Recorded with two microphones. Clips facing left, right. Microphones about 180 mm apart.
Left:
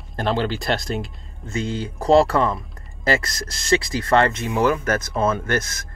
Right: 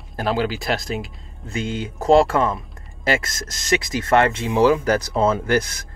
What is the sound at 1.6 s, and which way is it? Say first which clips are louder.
Speech: right 1 dB; 20° right (ahead or behind).